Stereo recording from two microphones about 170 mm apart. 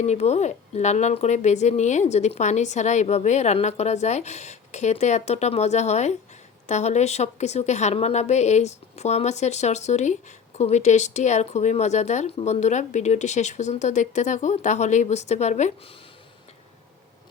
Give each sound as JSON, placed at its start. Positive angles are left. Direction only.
{"t": 0.0, "sound": "a woman's voice", "side_deg": 40}